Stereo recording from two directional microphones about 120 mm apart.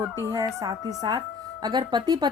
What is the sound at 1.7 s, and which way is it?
Speech, 35° right (ahead or behind).